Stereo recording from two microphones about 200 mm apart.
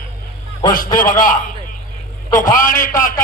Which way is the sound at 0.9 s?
45° left (ahead or behind).